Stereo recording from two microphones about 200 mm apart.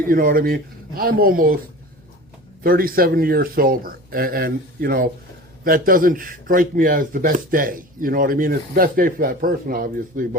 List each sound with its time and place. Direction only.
0.1 s speech: 45° right (ahead or behind)
2.6 s speech: 45° right (ahead or behind)